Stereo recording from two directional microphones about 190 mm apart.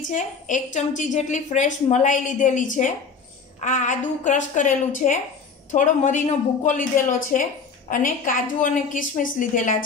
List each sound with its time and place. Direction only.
0.1 s a woman's voice: 40° left (ahead or behind)